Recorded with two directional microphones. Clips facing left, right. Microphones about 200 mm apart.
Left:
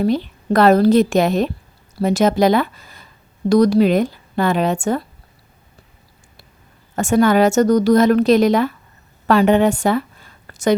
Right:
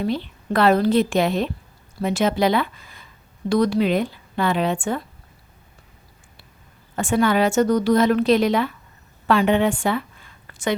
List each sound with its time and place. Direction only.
0.0 s a woman's voice: 40° left (ahead or behind)
6.9 s a woman's voice: 45° left (ahead or behind)